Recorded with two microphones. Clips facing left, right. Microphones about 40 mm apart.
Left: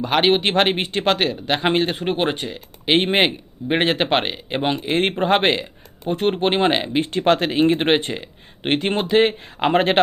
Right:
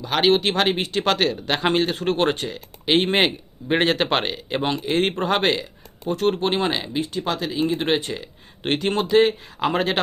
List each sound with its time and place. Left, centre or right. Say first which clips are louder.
0.0 s speech: left 1 dB; left